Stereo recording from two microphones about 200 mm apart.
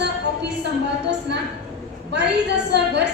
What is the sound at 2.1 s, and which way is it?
Speech, 55° right (ahead or behind).